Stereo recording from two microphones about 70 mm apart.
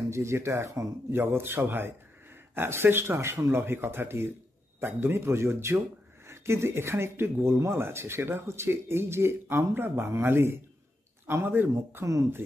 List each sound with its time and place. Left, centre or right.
0.1 s speech: right
1.2 s speech: right
11.7 s speech: right